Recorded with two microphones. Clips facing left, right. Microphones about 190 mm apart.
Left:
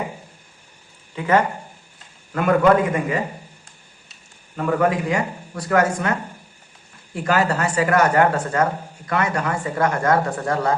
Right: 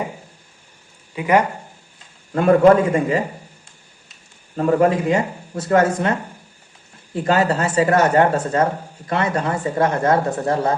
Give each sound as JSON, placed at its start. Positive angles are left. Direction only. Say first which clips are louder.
{"t": 1.1, "sound": "speech", "louder": "right 2 dB", "side_deg": -15}
{"t": 2.3, "sound": "a man's voice", "louder": "right 4 dB", "side_deg": -30}
{"t": 4.5, "sound": "speech", "louder": "right 4 dB", "side_deg": -30}